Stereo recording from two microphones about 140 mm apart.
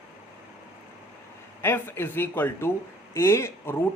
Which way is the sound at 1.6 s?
15° left (ahead or behind).